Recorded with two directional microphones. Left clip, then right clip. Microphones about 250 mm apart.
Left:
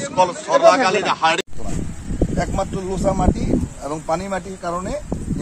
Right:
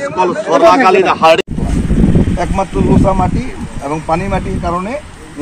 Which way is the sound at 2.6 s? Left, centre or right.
Centre.